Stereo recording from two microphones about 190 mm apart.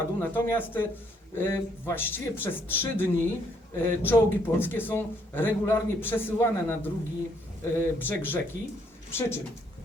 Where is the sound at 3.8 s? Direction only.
10° left (ahead or behind).